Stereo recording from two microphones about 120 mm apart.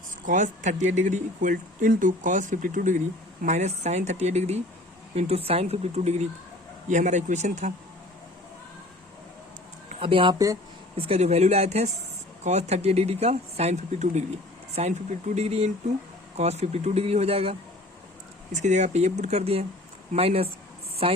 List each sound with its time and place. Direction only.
0.3 s speech: 90° right
3.4 s speech: 75° right (ahead or behind)
6.8 s speech: 90° right
10.0 s speech: 50° right (ahead or behind)
10.3 s speech: 25° right (ahead or behind)
10.9 s speech: 55° right (ahead or behind)
18.5 s speech: 75° right (ahead or behind); by 21.2 s 50° right (ahead or behind)